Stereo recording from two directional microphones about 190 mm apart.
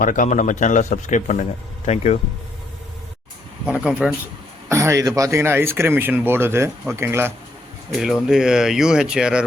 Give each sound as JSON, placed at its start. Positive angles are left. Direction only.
{"t": 0.0, "sound": "a man's voice", "side_deg": 45}
{"t": 3.7, "sound": "speech", "side_deg": -5}